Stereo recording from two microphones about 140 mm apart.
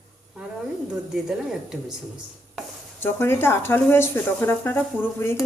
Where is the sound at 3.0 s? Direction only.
15° left (ahead or behind).